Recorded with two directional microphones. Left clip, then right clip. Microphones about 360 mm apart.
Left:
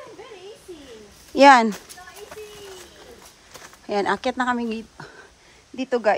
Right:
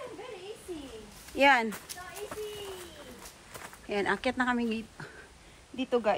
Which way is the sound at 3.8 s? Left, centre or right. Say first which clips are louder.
Left 7 dB; centre.